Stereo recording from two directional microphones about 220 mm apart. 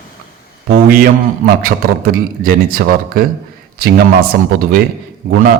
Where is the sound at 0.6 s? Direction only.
45° right (ahead or behind).